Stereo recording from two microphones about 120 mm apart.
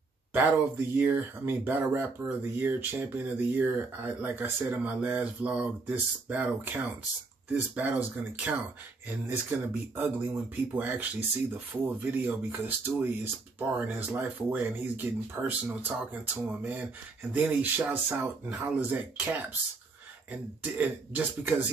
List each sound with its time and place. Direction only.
0.3 s speech: 15° right (ahead or behind)
9.7 s speech: 15° right (ahead or behind)
20.7 s speech: 15° right (ahead or behind)